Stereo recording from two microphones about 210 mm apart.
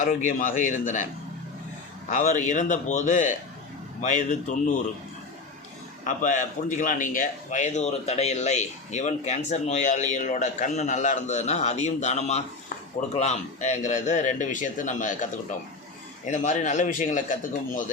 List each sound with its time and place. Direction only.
0.0 s a man's voice: 40° left (ahead or behind)
2.0 s a man's voice: 35° left (ahead or behind)
6.1 s a man's voice: 40° left (ahead or behind)